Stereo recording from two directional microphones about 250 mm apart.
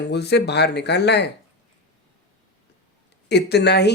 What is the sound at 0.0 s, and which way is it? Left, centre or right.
Speech, left.